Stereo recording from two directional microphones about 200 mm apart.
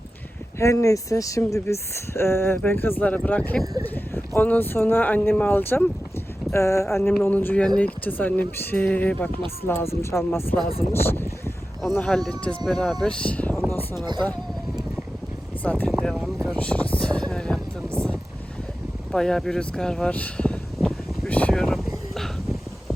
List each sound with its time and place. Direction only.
0.6 s speech: 15° left (ahead or behind)
14.0 s speech: 20° right (ahead or behind)
15.6 s a sound: 5° left (ahead or behind)